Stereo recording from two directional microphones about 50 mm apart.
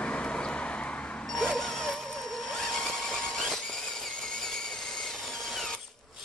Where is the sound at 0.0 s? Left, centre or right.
Left.